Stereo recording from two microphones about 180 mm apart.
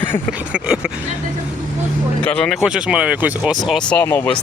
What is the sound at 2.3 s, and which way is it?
Speech, 5° left (ahead or behind).